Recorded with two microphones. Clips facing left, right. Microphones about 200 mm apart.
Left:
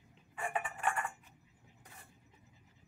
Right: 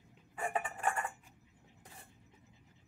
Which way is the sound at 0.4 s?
35° right (ahead or behind).